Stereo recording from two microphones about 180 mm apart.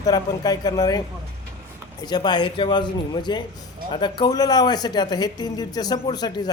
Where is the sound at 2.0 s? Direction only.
25° left (ahead or behind).